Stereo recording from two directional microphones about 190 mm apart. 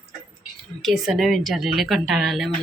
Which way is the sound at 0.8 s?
Centre (ahead or behind).